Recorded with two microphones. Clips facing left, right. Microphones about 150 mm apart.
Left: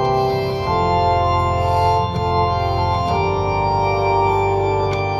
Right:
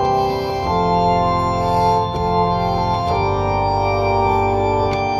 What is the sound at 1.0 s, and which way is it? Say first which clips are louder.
Music: right 1 dB; 10° right (ahead or behind).